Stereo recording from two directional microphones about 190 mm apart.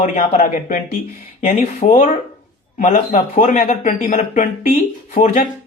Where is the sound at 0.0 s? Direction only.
40° left (ahead or behind).